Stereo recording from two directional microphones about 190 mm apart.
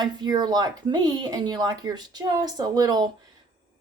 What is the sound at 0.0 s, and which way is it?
Speech, 20° right (ahead or behind).